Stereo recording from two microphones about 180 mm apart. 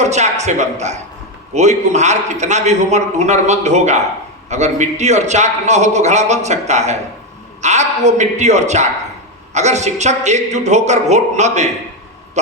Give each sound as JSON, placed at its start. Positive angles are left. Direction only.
{"t": 0.0, "sound": "a man's voice", "side_deg": -40}